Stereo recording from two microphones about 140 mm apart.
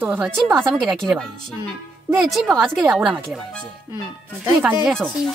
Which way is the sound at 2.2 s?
Centre (ahead or behind).